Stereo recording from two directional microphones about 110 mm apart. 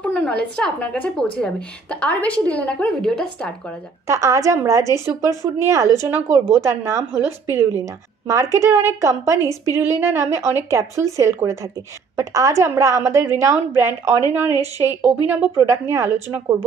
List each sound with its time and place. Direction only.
0.0 s a woman's voice: 10° left (ahead or behind)
4.1 s speech: 30° right (ahead or behind)
9.4 s a woman's voice: 35° left (ahead or behind)
9.8 s speech: 20° right (ahead or behind)
14.5 s a woman's voice: 35° left (ahead or behind)
14.9 s speech: 15° right (ahead or behind)